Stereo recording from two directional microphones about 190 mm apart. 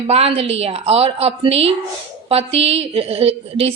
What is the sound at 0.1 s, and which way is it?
A woman's voice, 30° right (ahead or behind).